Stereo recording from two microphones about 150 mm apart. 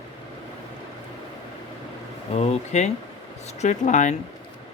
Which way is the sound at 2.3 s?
45° left (ahead or behind).